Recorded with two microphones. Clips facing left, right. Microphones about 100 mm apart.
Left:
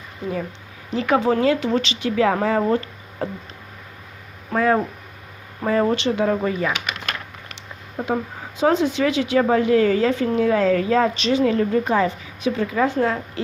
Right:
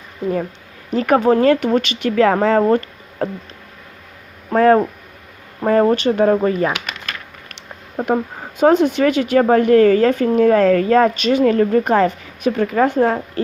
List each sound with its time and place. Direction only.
0.9 s a woman's voice: 50° right (ahead or behind)
4.5 s a woman's voice: 55° right (ahead or behind)
7.9 s a woman's voice: 50° right (ahead or behind)